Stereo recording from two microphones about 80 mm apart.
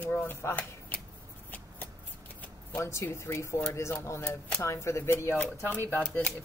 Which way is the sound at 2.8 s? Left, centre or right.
Left.